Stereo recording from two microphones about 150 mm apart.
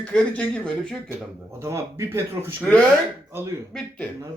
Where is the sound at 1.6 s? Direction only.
20° right (ahead or behind).